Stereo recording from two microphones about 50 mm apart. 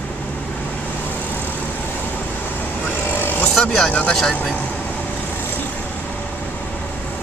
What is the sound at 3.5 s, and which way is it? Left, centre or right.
Speech, centre.